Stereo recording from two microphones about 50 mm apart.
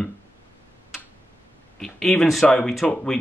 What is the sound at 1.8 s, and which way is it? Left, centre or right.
Speech, centre.